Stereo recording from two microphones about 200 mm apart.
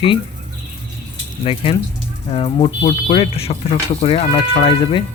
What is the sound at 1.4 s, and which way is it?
Speech, 25° left (ahead or behind).